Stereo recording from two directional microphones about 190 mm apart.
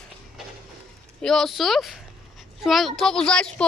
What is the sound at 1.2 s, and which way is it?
Speech, centre (ahead or behind).